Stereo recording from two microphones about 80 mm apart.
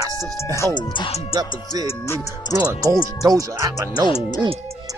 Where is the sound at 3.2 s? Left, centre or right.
Right.